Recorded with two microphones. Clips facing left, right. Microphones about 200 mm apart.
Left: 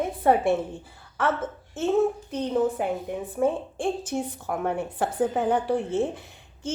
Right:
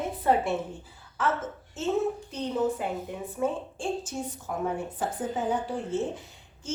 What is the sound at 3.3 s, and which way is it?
A woman's voice, 55° left (ahead or behind).